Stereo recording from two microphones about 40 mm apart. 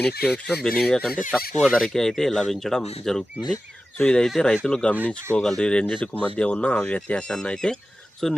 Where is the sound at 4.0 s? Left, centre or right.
Left.